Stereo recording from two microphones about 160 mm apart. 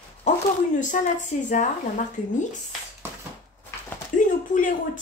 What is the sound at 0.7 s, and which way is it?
Speech, 50° left (ahead or behind).